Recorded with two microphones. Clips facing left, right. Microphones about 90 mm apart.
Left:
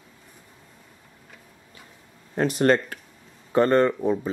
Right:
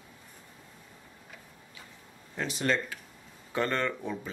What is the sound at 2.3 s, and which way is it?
Speech, 50° left (ahead or behind).